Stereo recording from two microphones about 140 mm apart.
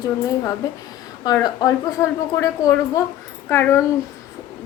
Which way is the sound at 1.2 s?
25° left (ahead or behind).